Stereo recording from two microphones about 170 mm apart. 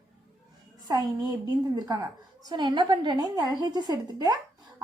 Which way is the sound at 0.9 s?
25° right (ahead or behind).